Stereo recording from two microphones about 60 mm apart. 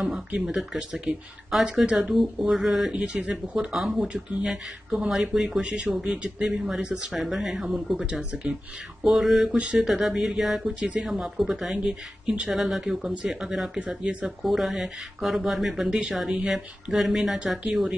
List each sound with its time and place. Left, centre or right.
0.7 s speech: centre
1.5 s speech: centre
1.9 s speech: centre
2.1 s speech: centre
2.9 s speech: centre
3.7 s speech: centre
8.2 s speech: centre
9.0 s speech: centre
9.6 s speech: centre
9.8 s speech: centre
14.4 s speech: centre